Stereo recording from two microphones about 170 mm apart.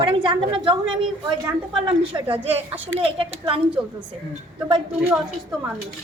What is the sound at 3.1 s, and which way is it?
Speech, 30° right (ahead or behind).